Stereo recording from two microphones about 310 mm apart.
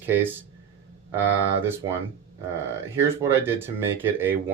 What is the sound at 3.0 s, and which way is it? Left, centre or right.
Speech, centre.